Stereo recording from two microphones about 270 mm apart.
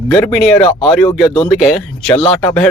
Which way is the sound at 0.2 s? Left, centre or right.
Centre.